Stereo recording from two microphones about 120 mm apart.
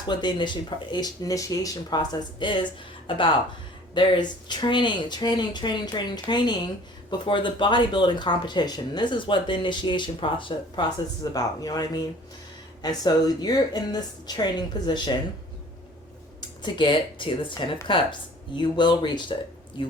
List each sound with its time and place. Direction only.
0.1 s speech: 35° left (ahead or behind)
16.7 s speech: 45° left (ahead or behind)